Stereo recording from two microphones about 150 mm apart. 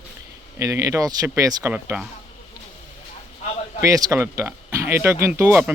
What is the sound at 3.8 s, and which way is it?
Speech, 20° right (ahead or behind).